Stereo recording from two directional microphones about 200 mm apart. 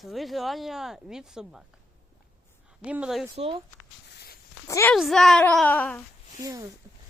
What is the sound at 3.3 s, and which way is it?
Speech, 30° right (ahead or behind).